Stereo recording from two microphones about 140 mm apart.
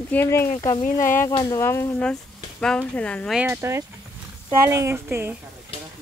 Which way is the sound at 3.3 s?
5° right (ahead or behind).